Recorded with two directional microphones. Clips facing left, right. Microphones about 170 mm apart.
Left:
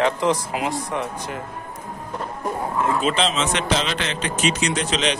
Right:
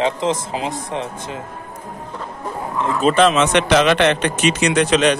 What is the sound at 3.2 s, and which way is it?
A man's voice, 65° right (ahead or behind).